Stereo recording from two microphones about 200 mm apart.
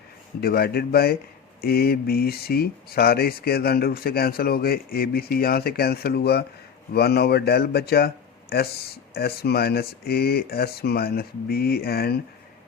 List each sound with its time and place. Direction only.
0.4 s speech: 50° left (ahead or behind)